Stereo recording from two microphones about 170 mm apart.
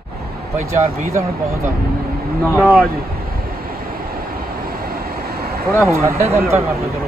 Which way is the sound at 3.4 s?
60° right (ahead or behind).